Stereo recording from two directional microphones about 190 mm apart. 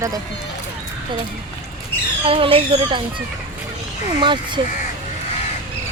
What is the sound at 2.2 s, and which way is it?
Speech, 30° right (ahead or behind).